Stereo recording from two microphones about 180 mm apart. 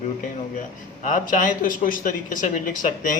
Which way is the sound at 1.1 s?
45° left (ahead or behind).